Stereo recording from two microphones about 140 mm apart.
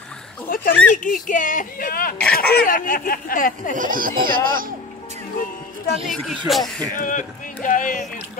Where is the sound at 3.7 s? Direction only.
80° right.